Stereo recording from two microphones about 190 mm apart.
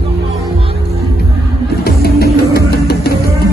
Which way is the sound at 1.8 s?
55° left (ahead or behind).